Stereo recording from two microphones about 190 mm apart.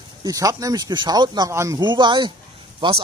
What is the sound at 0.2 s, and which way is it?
Speech, 20° right (ahead or behind).